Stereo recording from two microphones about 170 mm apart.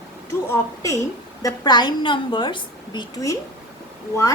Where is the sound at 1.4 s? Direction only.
25° left (ahead or behind).